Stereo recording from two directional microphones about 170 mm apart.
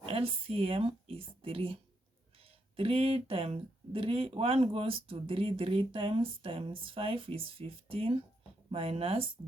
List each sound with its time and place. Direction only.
0.0 s speech: 35° right (ahead or behind)